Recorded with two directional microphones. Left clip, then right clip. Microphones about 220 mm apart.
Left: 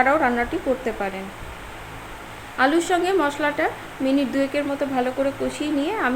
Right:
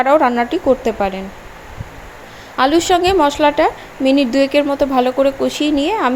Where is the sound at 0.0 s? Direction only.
35° right (ahead or behind).